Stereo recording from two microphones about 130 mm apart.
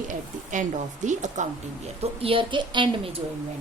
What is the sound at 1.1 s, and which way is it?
Speech, 70° right (ahead or behind).